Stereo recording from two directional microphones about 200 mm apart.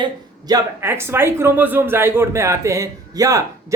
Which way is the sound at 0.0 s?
20° right (ahead or behind).